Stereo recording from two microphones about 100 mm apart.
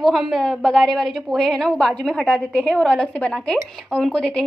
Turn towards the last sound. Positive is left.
turn(degrees=10)  # may be behind; listen again after turning